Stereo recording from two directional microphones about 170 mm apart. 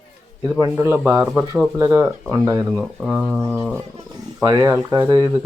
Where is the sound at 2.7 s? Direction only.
5° right (ahead or behind).